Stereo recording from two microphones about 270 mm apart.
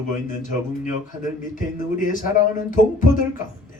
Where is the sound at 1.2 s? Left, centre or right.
Left.